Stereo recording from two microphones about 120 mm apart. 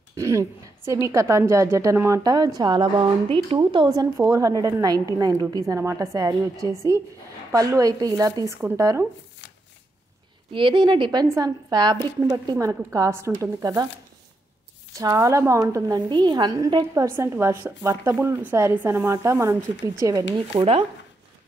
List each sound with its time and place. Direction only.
0.1 s a sound: 25° right (ahead or behind)
1.0 s a woman's voice: 25° right (ahead or behind)
10.5 s a woman's voice: 45° right (ahead or behind); by 13.8 s 25° right (ahead or behind)
15.0 s a woman's voice: 25° right (ahead or behind)
16.1 s a woman's voice: 40° right (ahead or behind)